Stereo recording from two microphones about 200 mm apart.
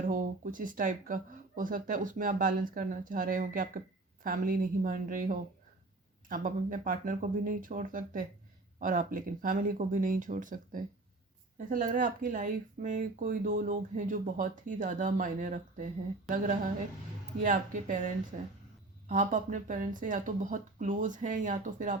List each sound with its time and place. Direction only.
0.0 s speech: 40° right (ahead or behind)
17.4 s speech: 40° right (ahead or behind)